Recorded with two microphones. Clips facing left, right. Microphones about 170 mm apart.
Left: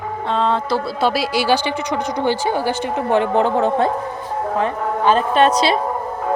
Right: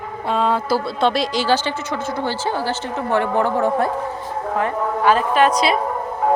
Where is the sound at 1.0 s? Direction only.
5° left (ahead or behind); by 5.5 s 25° left (ahead or behind).